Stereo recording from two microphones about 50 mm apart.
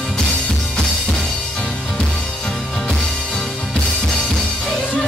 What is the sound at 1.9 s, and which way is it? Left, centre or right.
Music, centre.